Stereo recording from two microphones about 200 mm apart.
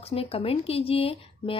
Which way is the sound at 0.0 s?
30° left (ahead or behind).